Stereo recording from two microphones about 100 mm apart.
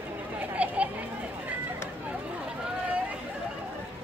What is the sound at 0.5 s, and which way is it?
Children playing, 15° right (ahead or behind).